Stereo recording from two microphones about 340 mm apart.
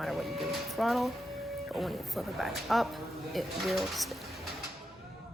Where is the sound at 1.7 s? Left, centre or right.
Centre.